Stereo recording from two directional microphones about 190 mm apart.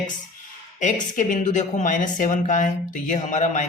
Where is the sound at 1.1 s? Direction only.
45° left (ahead or behind).